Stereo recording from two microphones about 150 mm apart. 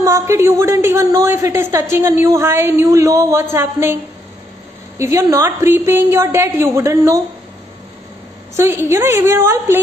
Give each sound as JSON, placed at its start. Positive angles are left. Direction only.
{"t": 0.0, "sound": "a woman's voice", "side_deg": -20}
{"t": 8.5, "sound": "a woman's voice", "side_deg": -15}